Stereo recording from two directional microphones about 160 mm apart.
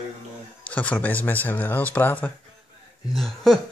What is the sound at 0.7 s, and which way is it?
Speech, 10° left (ahead or behind).